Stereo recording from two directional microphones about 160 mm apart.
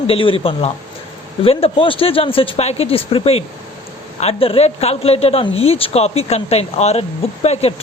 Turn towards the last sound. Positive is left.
turn(degrees=40)  # may be behind; listen again after turning